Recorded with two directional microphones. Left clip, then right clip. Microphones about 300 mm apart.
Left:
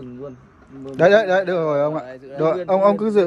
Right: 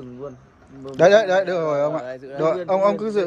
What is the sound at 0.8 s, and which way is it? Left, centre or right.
A man's voice, centre.